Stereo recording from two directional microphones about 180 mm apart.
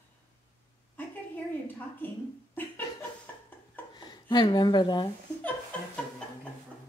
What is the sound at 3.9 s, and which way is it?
Speech, 25° left (ahead or behind).